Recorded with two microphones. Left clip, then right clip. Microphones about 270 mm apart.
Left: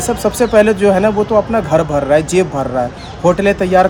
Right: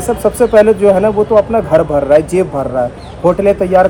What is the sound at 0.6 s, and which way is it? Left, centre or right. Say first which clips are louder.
Speech: right 3 dB; centre.